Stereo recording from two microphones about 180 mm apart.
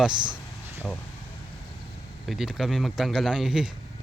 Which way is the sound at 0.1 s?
25° right (ahead or behind).